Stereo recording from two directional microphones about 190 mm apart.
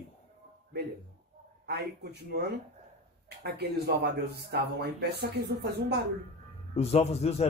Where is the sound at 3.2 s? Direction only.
60° right (ahead or behind).